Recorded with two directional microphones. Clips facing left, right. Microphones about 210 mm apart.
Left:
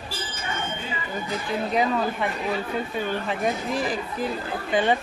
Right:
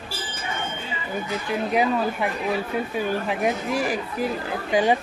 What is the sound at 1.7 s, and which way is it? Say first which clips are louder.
Speech: right 2 dB; 10° right (ahead or behind).